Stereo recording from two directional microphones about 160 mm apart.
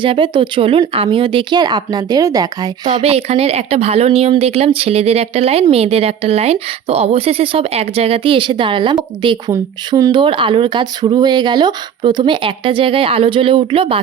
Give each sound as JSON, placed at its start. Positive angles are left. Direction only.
{"t": 0.0, "sound": "speech", "side_deg": -30}
{"t": 3.0, "sound": "speech", "side_deg": -40}